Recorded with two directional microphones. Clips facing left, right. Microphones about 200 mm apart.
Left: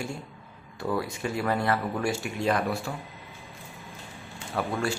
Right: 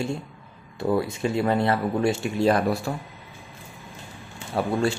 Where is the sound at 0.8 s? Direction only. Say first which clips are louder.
Right 6 dB; 25° right (ahead or behind).